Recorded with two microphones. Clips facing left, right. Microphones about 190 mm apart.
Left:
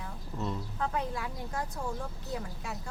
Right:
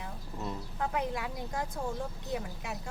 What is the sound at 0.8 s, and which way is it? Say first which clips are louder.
Speech: right 2 dB; 20° right (ahead or behind).